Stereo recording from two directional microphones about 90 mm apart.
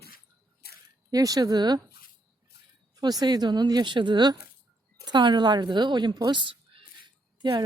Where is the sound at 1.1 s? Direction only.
45° right (ahead or behind).